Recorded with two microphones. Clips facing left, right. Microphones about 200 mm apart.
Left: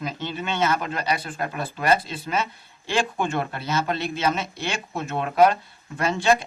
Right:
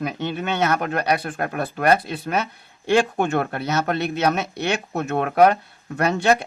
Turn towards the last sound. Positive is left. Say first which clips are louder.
# right 2 dB
turn(degrees=-65)  # may be behind; listen again after turning